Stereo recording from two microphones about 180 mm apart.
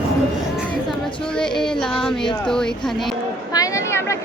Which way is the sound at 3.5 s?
20° left (ahead or behind).